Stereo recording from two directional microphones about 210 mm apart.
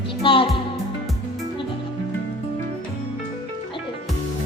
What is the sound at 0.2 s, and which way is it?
Music, 25° left (ahead or behind).